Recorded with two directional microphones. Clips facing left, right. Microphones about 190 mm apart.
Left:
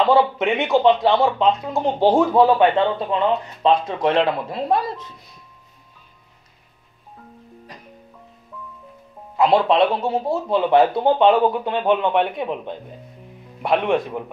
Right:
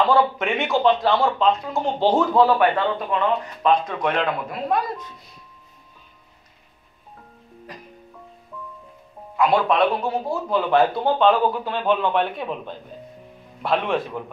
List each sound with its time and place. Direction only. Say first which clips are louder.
0.1 s speech: left 2 dB; 20° left (ahead or behind)
1.7 s speech: left 3 dB; centre (ahead or behind)
2.1 s speech: left 1 dB; 15° left (ahead or behind)
9.4 s speech: left 3 dB; 25° left (ahead or behind)